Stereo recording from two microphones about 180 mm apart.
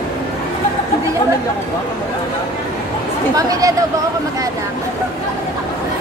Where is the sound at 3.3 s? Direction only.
20° right (ahead or behind).